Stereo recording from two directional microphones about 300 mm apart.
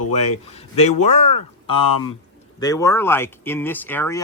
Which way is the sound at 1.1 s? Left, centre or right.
Left.